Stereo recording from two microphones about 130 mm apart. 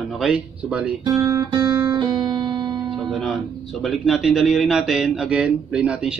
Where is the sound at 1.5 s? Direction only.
35° right (ahead or behind).